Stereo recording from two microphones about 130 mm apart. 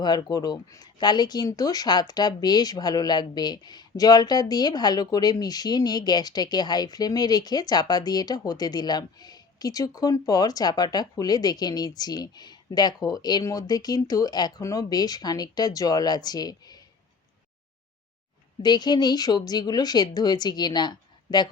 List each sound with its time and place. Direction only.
0.0 s speech: 30° left (ahead or behind)
18.6 s speech: 35° left (ahead or behind)